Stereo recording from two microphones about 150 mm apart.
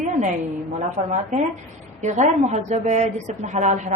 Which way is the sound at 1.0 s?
50° right (ahead or behind).